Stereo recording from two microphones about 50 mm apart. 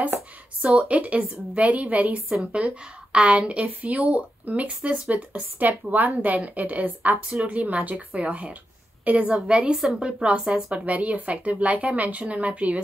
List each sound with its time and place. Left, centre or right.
0.6 s a woman's voice: right
7.2 s speech: centre
7.5 s a woman's voice: right
9.6 s speech: centre
10.7 s a woman's voice: right